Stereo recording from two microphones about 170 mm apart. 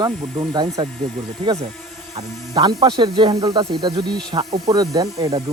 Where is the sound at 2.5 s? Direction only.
25° right (ahead or behind).